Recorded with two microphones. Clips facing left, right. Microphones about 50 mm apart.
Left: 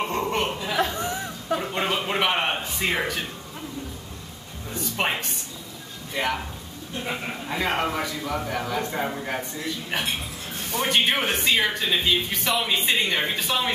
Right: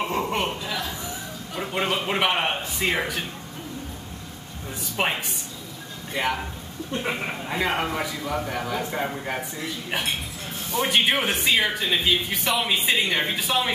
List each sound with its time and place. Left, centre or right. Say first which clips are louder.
0.0 s chuckle: even; centre
0.7 s chatter: left 6 dB; left
1.6 s a sound: right 1 dB; centre
2.0 s speech: even; centre
4.9 s speech: right 1 dB; centre
10.8 s speech: right 1 dB; centre